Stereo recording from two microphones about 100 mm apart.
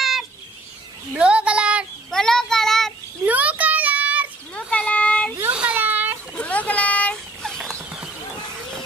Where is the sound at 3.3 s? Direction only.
15° right (ahead or behind).